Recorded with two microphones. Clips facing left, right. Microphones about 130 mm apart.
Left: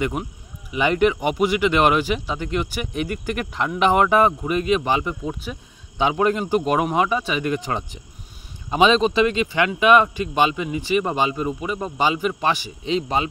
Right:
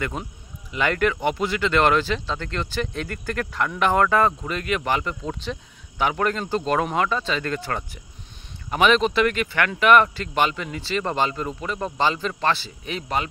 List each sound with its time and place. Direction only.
0.0 s speech: 15° left (ahead or behind)